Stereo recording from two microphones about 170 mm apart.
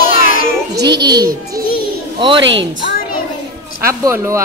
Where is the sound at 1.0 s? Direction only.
25° right (ahead or behind).